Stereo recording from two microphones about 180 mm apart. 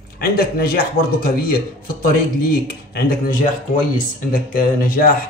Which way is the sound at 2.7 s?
55° left (ahead or behind).